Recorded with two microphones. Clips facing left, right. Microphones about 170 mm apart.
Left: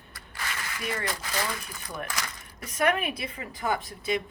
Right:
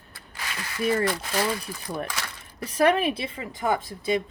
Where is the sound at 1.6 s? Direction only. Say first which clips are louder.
Right 5 dB; 35° right (ahead or behind).